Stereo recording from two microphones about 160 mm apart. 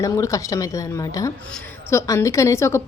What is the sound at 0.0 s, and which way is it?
A woman's voice, 20° left (ahead or behind).